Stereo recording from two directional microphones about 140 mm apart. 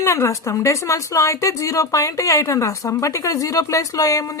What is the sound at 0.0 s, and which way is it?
Speech, 20° left (ahead or behind).